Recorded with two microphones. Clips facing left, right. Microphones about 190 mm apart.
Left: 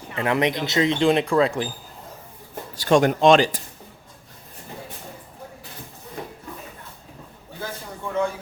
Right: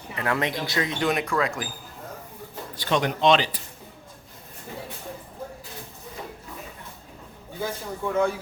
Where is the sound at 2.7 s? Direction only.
45° left (ahead or behind).